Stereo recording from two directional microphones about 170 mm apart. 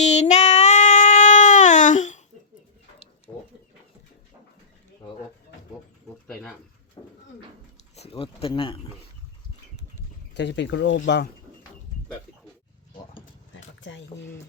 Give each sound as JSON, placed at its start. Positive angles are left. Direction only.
{"t": 0.0, "sound": "child singing", "side_deg": 45}
{"t": 3.3, "sound": "chicken", "side_deg": 20}
{"t": 7.0, "sound": "a sound", "side_deg": 25}
{"t": 8.1, "sound": "speech", "side_deg": 35}
{"t": 10.3, "sound": "speech", "side_deg": 90}
{"t": 13.5, "sound": "a sound", "side_deg": 90}